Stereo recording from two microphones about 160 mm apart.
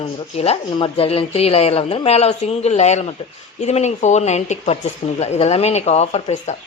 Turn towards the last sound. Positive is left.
turn(degrees=45)  # may be behind; listen again after turning